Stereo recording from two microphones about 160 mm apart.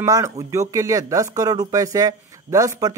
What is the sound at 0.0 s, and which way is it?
Speech, 20° right (ahead or behind).